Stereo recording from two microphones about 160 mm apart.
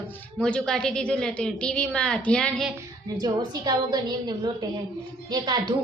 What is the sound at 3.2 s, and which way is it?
A woman's voice, 25° right (ahead or behind).